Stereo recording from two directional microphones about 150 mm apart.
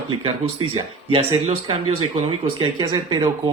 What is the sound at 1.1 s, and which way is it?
Speech, 35° right (ahead or behind).